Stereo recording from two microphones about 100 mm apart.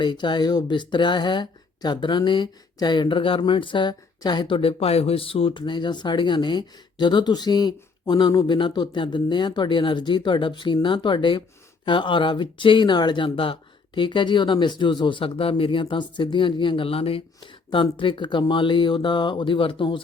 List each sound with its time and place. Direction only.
0.0 s speech: 50° left (ahead or behind)